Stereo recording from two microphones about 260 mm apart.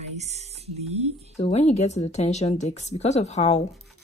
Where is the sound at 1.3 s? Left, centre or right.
Left.